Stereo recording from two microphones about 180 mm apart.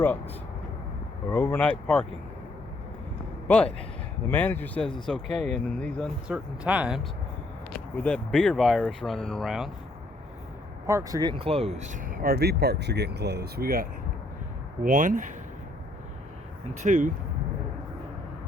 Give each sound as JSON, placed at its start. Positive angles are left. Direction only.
{"t": 1.3, "sound": "speech", "side_deg": 10}
{"t": 3.4, "sound": "speech", "side_deg": 5}
{"t": 6.2, "sound": "speech", "side_deg": -5}
{"t": 7.7, "sound": "speech", "side_deg": 5}
{"t": 10.8, "sound": "speech", "side_deg": -15}
{"t": 14.8, "sound": "speech", "side_deg": -45}
{"t": 16.8, "sound": "speech", "side_deg": -45}